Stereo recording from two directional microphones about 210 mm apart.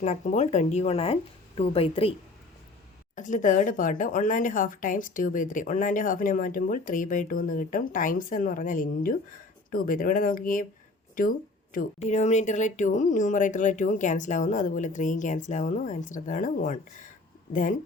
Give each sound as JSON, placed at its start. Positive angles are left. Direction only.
{"t": 0.0, "sound": "speech", "side_deg": 35}
{"t": 3.2, "sound": "speech", "side_deg": 35}